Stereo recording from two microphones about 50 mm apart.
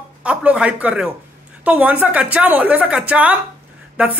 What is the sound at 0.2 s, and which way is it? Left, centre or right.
A woman's voice, right.